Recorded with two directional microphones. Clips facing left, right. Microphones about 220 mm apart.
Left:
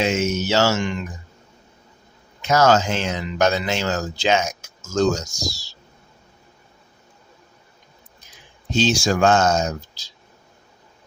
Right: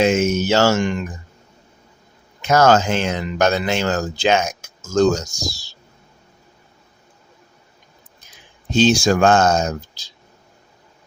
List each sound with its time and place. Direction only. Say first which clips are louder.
0.0 s speech: right 5 dB; 50° right (ahead or behind)
2.4 s speech: right 2 dB; 55° right (ahead or behind)
8.7 s speech: right 5 dB; 55° right (ahead or behind)